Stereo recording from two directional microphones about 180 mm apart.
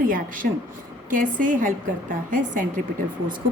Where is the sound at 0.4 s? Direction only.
55° right (ahead or behind).